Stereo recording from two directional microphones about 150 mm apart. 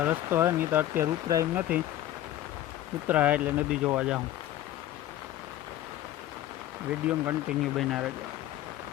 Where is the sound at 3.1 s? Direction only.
10° right (ahead or behind).